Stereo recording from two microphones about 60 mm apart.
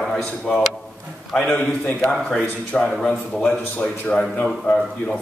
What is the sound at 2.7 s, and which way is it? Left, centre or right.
Speech, centre.